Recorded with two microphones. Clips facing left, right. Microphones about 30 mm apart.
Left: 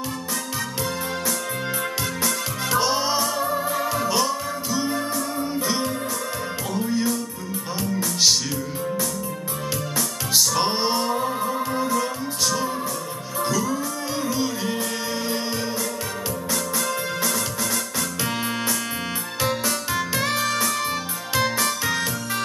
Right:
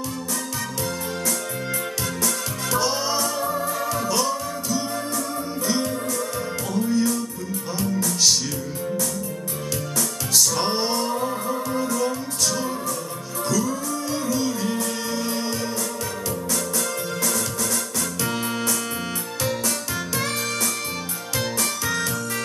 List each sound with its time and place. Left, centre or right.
2.2 s music: centre
6.7 s music: centre
9.9 s music: centre
21.4 s music: centre